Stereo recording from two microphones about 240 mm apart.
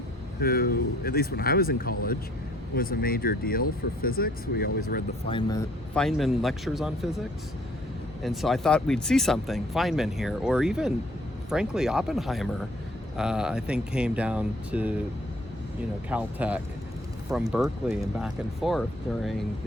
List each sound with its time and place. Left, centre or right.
0.3 s speech: left
5.3 s speech: centre
5.9 s speech: centre
8.2 s speech: centre
16.0 s speech: centre